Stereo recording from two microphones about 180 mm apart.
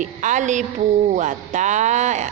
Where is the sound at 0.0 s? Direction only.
45° right (ahead or behind).